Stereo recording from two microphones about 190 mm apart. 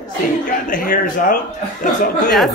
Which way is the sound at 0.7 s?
45° left (ahead or behind).